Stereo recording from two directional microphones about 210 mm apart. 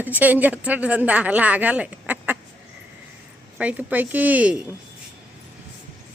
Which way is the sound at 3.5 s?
5° right (ahead or behind).